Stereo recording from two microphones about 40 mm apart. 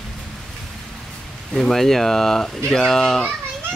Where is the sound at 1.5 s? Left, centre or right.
Centre.